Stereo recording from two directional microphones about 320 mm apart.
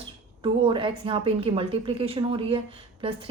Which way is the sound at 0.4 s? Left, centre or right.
Centre.